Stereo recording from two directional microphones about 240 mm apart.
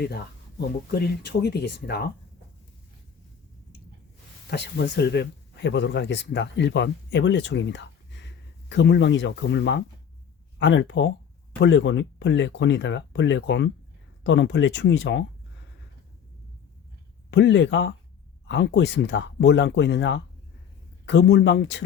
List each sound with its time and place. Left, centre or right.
0.9 s speech: left
4.4 s speech: left
17.3 s speech: left